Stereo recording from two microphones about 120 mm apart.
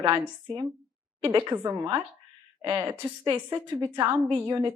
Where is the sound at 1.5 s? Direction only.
35° right (ahead or behind).